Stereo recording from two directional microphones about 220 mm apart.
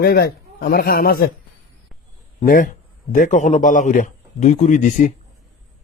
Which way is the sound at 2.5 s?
40° left (ahead or behind).